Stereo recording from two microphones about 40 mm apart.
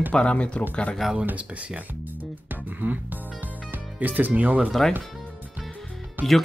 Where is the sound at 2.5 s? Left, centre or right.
Right.